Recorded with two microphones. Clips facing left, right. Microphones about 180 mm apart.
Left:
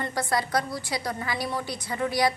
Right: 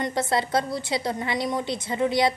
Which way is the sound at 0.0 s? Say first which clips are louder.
Right 3 dB; 25° right (ahead or behind).